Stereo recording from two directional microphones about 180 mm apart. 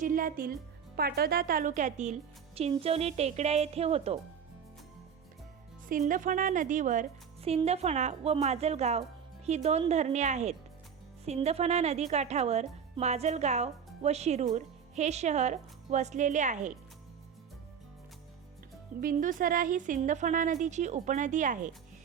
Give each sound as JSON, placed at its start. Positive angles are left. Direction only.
{"t": 0.0, "sound": "speech", "side_deg": -50}
{"t": 5.9, "sound": "speech", "side_deg": -50}
{"t": 18.9, "sound": "speech", "side_deg": -50}